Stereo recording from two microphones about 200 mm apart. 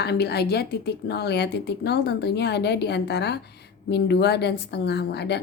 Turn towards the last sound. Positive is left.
turn(degrees=55)  # may be behind; listen again after turning